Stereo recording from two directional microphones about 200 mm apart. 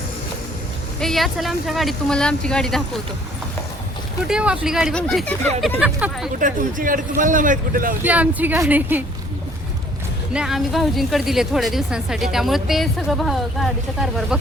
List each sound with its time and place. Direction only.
0.9 s speech: centre (ahead or behind)
4.3 s speech: 5° right (ahead or behind)
5.8 s a woman's voice: 5° right (ahead or behind)
6.4 s speech: 40° right (ahead or behind)
8.0 s a woman's voice: 5° right (ahead or behind)
10.3 s speech: centre (ahead or behind)